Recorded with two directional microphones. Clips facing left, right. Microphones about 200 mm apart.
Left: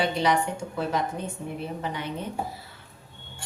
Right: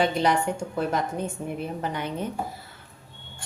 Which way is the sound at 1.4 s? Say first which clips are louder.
Right 3 dB; 45° right (ahead or behind).